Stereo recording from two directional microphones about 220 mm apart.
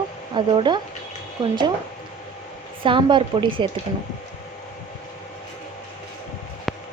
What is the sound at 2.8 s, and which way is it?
Speech, 20° right (ahead or behind).